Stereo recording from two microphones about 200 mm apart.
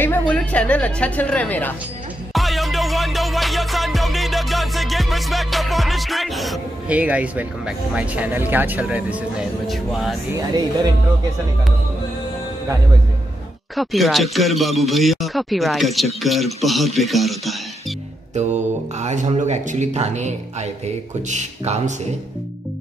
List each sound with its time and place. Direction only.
0.3 s a woman's voice: 5° left (ahead or behind)
2.3 s music: centre (ahead or behind)
13.7 s music: centre (ahead or behind)
18.3 s speech: 35° right (ahead or behind)